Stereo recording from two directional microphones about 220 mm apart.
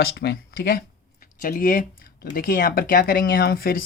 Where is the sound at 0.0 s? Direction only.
45° left (ahead or behind).